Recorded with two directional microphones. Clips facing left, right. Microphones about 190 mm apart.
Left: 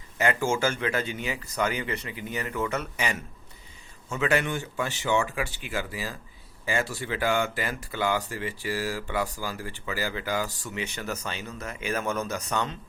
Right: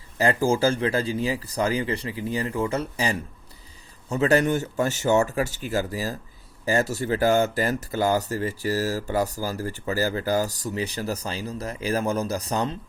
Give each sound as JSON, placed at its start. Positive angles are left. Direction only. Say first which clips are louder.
{"t": 0.2, "sound": "speech", "louder": "right 4 dB", "side_deg": -35}